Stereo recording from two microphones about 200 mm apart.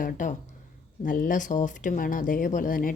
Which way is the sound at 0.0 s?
40° left (ahead or behind).